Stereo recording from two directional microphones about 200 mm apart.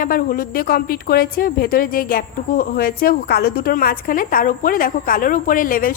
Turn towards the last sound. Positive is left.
turn(degrees=45)  # may be behind; listen again after turning